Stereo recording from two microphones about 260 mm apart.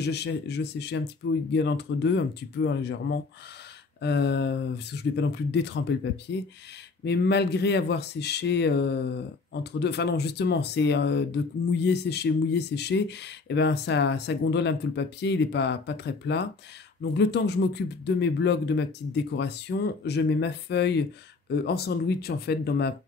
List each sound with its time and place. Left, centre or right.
0.0 s speech: left
7.1 s speech: left